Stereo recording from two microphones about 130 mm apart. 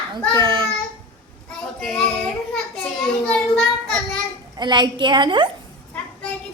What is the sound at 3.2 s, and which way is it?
Child singing, 10° left (ahead or behind).